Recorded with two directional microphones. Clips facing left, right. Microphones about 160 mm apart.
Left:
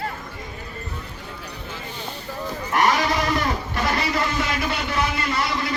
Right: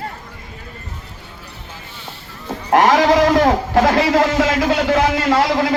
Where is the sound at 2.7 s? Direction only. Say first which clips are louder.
Right 9 dB; 90° right.